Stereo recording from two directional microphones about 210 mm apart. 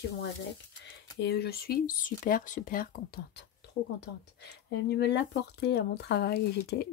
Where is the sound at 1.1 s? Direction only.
50° left (ahead or behind).